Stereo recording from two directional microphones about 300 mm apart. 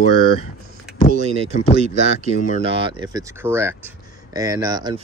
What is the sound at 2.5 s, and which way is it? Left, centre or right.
Speech, centre.